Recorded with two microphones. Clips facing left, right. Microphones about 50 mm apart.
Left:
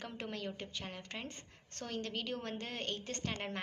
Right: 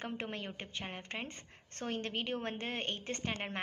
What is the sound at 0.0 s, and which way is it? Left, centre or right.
A woman's voice, right.